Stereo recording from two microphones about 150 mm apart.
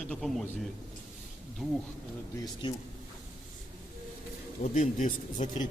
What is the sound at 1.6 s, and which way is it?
Speech, centre (ahead or behind).